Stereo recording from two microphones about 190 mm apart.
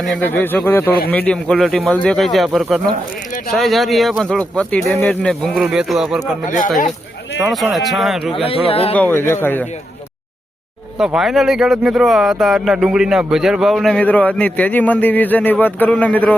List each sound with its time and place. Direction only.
0.0 s speech: 5° left (ahead or behind)
7.4 s speech: centre (ahead or behind)
8.3 s speech: 30° left (ahead or behind)
8.9 s speech: 10° left (ahead or behind)
10.9 s speech: 5° right (ahead or behind)